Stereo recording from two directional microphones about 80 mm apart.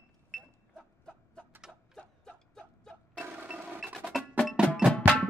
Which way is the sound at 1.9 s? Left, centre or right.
Centre.